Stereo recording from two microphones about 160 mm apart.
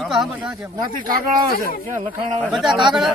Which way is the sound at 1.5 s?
70° left (ahead or behind).